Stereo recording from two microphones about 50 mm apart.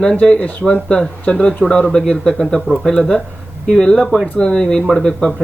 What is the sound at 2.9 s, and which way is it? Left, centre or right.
Speech, centre.